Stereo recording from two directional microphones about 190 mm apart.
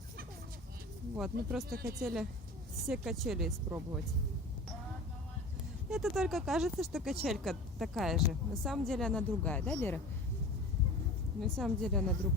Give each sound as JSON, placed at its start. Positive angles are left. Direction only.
{"t": 1.1, "sound": "speech", "side_deg": 0}
{"t": 1.7, "sound": "speech", "side_deg": -55}
{"t": 2.8, "sound": "speech", "side_deg": 0}
{"t": 5.9, "sound": "speech", "side_deg": 0}
{"t": 11.3, "sound": "speech", "side_deg": 0}